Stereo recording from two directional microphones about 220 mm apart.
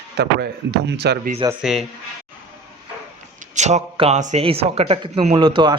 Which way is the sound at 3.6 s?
30° right (ahead or behind).